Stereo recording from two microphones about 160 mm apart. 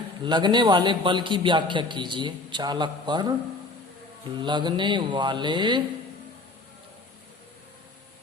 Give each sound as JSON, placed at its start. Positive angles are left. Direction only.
{"t": 0.3, "sound": "a man's voice", "side_deg": -30}
{"t": 4.4, "sound": "a man's voice", "side_deg": -30}